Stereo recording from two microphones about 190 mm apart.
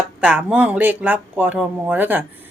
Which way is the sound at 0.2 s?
5° right (ahead or behind).